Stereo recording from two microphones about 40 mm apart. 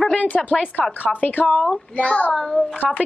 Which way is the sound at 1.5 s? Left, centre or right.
Left.